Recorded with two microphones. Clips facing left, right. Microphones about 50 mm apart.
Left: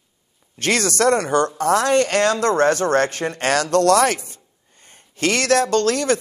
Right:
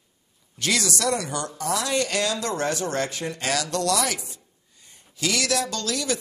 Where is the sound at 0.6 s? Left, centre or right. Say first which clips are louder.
Left 6 dB; left.